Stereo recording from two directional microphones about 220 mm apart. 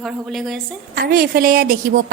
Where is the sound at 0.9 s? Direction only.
40° right (ahead or behind).